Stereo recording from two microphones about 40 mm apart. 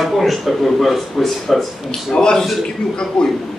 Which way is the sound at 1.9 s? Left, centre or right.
Centre.